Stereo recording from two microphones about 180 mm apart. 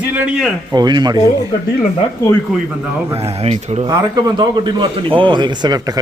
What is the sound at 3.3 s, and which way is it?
Speech, 35° right (ahead or behind).